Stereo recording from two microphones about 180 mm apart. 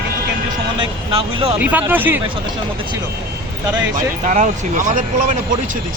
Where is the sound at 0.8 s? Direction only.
30° right (ahead or behind).